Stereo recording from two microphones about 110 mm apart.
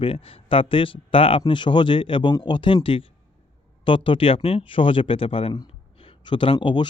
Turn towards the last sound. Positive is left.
turn(degrees=45)  # may be behind; listen again after turning